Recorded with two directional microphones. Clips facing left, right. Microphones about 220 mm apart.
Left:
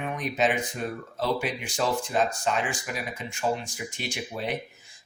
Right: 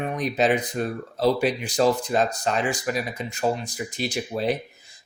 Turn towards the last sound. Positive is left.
turn(degrees=-35)  # may be behind; listen again after turning